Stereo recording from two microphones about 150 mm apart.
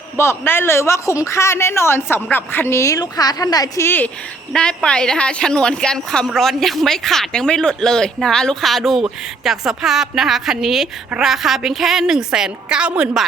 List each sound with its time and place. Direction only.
0.2 s a woman's voice: 15° left (ahead or behind); by 13.2 s 5° right (ahead or behind)